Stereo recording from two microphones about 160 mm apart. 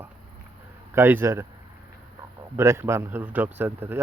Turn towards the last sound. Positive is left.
turn(degrees=-15)  # may be behind; listen again after turning